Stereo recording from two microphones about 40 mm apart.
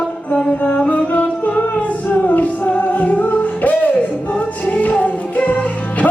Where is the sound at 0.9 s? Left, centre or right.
Left.